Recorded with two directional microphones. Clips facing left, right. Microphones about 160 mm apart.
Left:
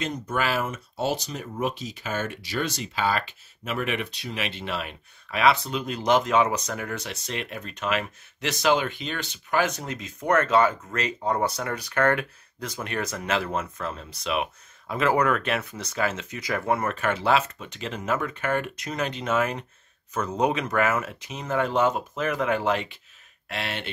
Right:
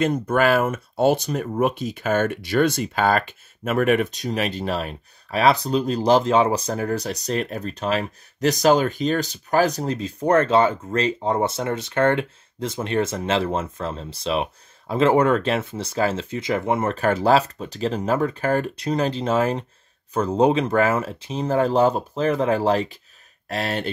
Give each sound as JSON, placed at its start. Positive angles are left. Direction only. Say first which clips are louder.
{"t": 0.0, "sound": "speech", "louder": "right 8 dB", "side_deg": -55}
{"t": 16.9, "sound": "speech", "louder": "right 9 dB", "side_deg": -35}